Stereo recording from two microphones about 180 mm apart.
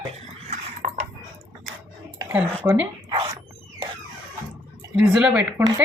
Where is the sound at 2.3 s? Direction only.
10° right (ahead or behind).